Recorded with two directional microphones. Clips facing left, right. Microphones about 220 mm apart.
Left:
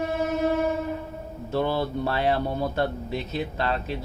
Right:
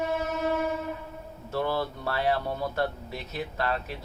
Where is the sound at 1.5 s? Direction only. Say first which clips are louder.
Left 4 dB; 25° left (ahead or behind).